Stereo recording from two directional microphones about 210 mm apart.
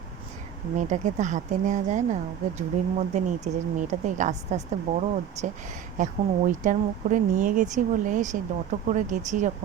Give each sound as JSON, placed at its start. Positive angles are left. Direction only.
{"t": 0.8, "sound": "speech", "side_deg": -35}